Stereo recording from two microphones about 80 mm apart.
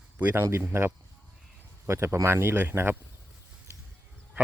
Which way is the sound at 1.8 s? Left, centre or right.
Right.